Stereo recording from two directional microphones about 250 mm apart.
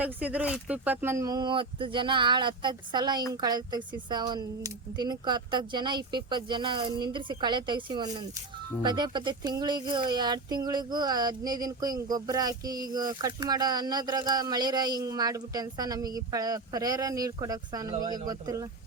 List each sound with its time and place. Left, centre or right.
0.0 s speech: centre